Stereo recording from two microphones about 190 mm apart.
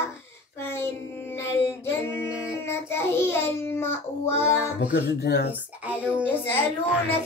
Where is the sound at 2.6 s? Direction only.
15° left (ahead or behind).